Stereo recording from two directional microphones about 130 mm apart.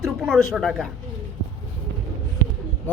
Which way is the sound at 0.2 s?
Centre (ahead or behind).